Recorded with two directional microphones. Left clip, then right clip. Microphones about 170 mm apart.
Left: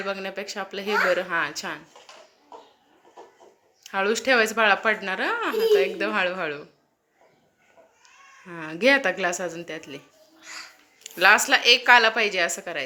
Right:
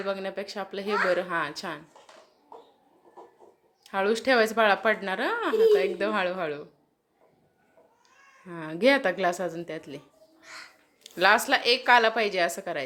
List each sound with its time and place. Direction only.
0.0 s speech: 10° right (ahead or behind)
3.8 s speech: 15° right (ahead or behind)
8.4 s speech: 10° right (ahead or behind)